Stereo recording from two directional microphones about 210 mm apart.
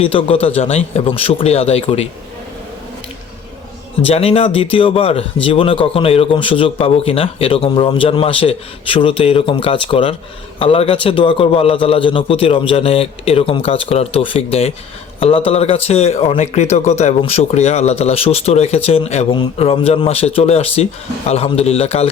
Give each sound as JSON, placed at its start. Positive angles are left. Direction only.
{"t": 0.0, "sound": "speech", "side_deg": 25}
{"t": 4.0, "sound": "speech", "side_deg": 30}